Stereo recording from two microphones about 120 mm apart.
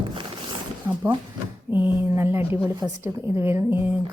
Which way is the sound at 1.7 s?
15° right (ahead or behind).